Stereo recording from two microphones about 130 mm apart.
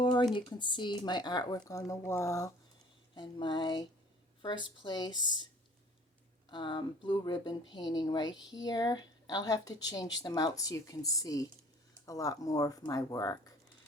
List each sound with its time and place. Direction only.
0.0 s a sound: 40° left (ahead or behind)
0.3 s speech: 35° left (ahead or behind)
3.2 s speech: 40° left (ahead or behind)
6.5 s speech: 40° left (ahead or behind)